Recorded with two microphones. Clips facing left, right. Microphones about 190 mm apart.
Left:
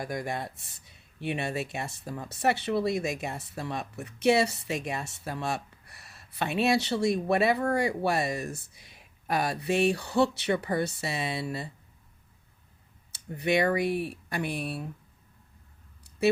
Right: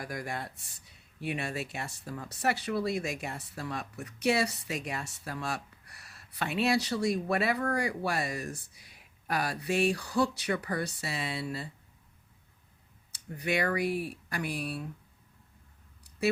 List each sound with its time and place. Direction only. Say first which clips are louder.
0.0 s speech: left 4 dB; 25° left (ahead or behind)
13.1 s speech: left 5 dB; 25° left (ahead or behind)